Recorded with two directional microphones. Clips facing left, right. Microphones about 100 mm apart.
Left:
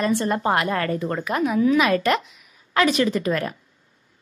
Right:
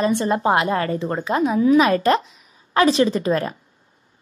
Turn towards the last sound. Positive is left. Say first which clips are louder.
# right 3 dB
turn(degrees=-30)  # may be behind; listen again after turning